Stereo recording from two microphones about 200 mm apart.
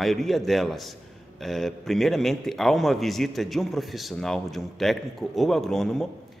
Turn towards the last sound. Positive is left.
turn(degrees=0)  # may be behind; listen again after turning